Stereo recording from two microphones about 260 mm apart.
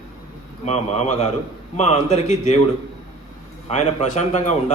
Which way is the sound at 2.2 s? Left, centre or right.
Centre.